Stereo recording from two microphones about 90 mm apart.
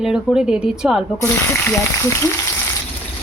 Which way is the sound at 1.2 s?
30° left (ahead or behind).